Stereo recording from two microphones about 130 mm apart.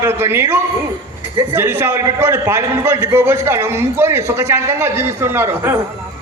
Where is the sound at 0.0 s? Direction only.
20° right (ahead or behind).